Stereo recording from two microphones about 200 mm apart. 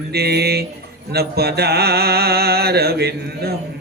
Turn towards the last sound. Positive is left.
turn(degrees=-50)  # may be behind; listen again after turning